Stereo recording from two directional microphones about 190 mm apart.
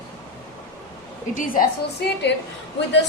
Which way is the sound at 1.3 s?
45° left (ahead or behind).